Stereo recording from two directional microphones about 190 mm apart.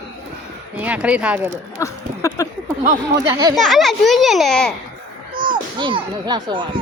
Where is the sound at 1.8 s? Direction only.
15° left (ahead or behind).